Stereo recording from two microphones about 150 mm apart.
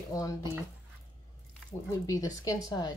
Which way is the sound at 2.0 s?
25° left (ahead or behind).